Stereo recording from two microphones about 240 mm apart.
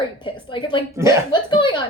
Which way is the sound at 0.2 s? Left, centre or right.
Centre.